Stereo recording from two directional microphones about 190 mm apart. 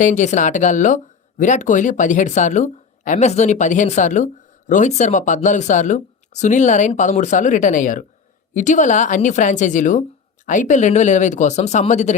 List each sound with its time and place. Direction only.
0.0 s speech: 40° left (ahead or behind)